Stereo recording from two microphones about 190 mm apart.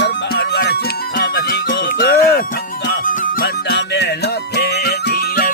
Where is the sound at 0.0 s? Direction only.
60° left (ahead or behind).